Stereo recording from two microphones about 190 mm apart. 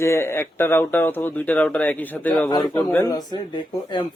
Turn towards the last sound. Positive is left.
turn(degrees=25)  # may be behind; listen again after turning